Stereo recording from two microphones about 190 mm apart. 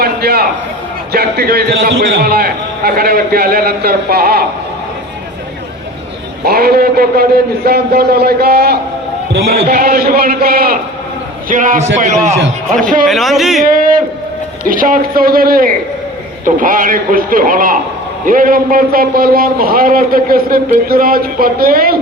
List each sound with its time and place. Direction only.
0.0 s a sound: 55° right (ahead or behind)
1.1 s a man's voice: 55° right (ahead or behind)
6.4 s a man's voice: 55° right (ahead or behind)
13.1 s speech: centre (ahead or behind)
13.7 s a man's voice: 45° right (ahead or behind)